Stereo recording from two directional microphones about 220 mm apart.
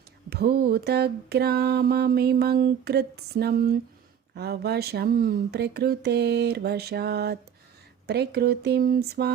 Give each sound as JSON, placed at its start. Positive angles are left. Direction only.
{"t": 0.3, "sound": "mantra", "side_deg": -45}